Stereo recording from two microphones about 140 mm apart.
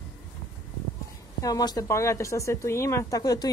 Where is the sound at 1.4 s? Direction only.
25° left (ahead or behind).